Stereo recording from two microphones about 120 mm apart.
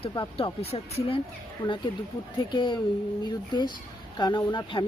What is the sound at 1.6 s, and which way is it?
Speech, 40° left (ahead or behind).